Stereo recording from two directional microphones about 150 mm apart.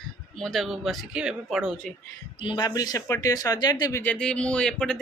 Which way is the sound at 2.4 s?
30° left (ahead or behind).